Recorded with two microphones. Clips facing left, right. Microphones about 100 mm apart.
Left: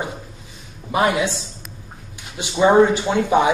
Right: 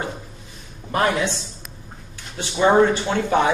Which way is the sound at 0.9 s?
10° left (ahead or behind).